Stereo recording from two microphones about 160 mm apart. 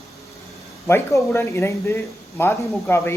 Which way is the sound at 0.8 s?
15° left (ahead or behind).